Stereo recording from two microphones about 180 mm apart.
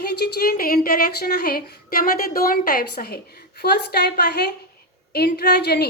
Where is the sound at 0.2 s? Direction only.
60° left (ahead or behind).